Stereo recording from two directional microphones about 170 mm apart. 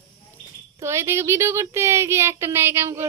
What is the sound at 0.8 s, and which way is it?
Speech, 15° right (ahead or behind).